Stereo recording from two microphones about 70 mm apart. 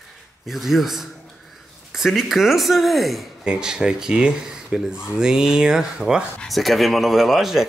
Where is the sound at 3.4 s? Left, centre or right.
Centre.